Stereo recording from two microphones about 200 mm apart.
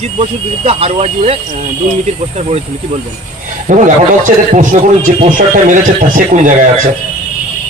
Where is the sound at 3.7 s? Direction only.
40° right (ahead or behind).